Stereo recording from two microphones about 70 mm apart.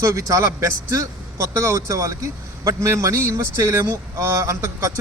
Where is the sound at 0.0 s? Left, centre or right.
Right.